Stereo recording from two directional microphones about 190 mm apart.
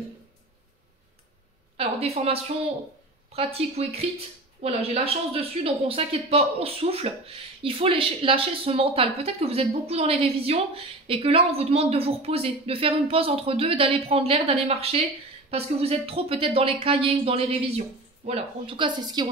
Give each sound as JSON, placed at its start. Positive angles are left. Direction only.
{"t": 1.8, "sound": "speech", "side_deg": -30}